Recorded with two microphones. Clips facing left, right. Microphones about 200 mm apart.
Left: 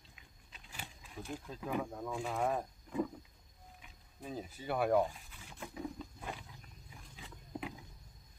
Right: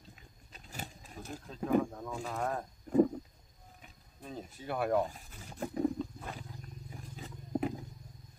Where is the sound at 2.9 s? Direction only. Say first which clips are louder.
Right 11 dB; 45° right (ahead or behind).